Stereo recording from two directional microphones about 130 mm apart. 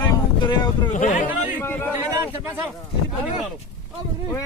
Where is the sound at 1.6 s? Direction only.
15° left (ahead or behind).